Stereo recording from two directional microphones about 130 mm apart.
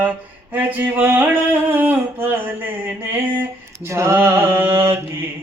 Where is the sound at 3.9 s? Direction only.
20° right (ahead or behind).